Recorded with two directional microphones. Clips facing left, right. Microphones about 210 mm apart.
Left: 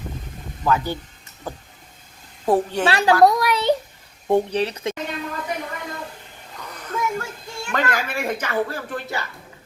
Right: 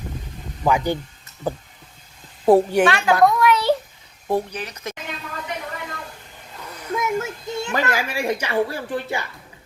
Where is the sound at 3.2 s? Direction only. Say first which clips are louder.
Even; 40° left (ahead or behind).